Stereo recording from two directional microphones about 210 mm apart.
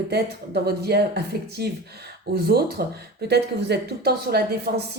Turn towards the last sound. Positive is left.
turn(degrees=-50)  # may be behind; listen again after turning